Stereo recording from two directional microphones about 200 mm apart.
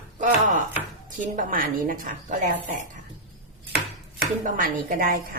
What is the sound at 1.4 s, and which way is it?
A woman's voice, 45° right (ahead or behind).